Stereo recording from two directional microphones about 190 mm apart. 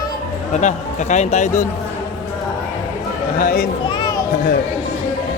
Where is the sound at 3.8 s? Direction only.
25° left (ahead or behind).